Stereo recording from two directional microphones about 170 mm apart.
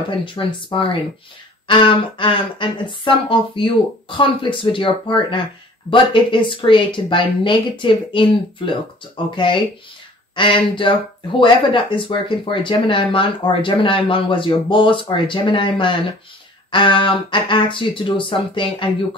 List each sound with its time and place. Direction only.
0.2 s speech: 30° left (ahead or behind)